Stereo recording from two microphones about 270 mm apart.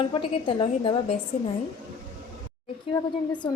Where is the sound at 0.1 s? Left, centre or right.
Centre.